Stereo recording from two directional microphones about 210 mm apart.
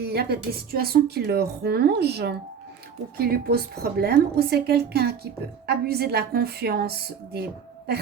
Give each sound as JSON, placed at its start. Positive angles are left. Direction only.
{"t": 0.0, "sound": "a woman's voice", "side_deg": -50}